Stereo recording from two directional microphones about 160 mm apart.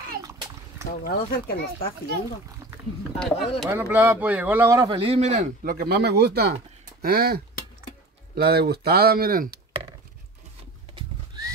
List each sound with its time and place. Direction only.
0.2 s splash: 20° right (ahead or behind)
1.0 s speech: 70° left (ahead or behind)
3.2 s speech: centre (ahead or behind)
3.8 s speech: 10° right (ahead or behind)
4.9 s speech: 40° right (ahead or behind); by 6.5 s 90° right
7.0 s speech: 70° right (ahead or behind)
11.0 s horse: 25° right (ahead or behind)